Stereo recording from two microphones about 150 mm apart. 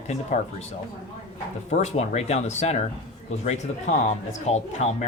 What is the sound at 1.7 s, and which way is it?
Speech, 45° left (ahead or behind).